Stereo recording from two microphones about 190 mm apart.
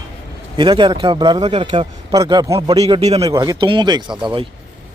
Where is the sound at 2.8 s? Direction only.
35° right (ahead or behind).